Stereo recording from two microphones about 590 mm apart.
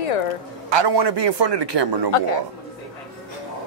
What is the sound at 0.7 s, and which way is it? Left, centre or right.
A man's voice, right.